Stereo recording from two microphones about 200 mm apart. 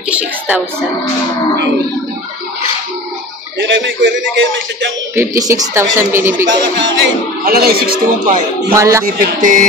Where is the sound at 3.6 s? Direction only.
65° right (ahead or behind).